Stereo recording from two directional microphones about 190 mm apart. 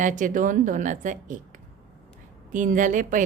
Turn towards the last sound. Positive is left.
turn(degrees=-45)  # may be behind; listen again after turning